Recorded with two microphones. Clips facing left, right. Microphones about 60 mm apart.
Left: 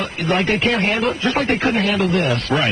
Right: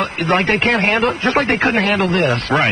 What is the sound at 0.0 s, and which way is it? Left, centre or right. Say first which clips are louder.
A man's voice: right 3 dB; right.